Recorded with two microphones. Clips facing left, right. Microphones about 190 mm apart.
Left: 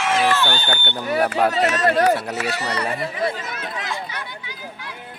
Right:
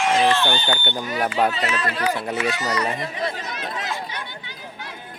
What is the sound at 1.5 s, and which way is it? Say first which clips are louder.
Speech: left 6 dB; 45° left (ahead or behind).